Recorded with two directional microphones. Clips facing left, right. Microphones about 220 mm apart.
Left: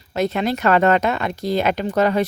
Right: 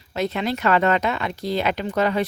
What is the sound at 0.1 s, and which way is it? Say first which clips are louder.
Speech: left 3 dB; 45° left (ahead or behind).